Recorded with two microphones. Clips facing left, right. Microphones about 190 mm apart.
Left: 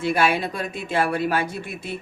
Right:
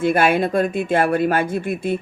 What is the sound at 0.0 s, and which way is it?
Speech, 50° right (ahead or behind).